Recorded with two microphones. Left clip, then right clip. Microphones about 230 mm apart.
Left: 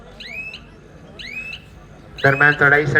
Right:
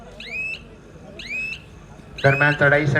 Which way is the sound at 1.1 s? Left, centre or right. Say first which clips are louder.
Right 2 dB; centre.